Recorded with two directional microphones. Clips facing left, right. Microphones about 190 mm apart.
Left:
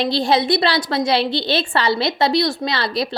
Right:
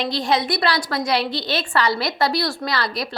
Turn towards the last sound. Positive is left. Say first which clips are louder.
# left 3 dB
turn(degrees=25)  # may be behind; listen again after turning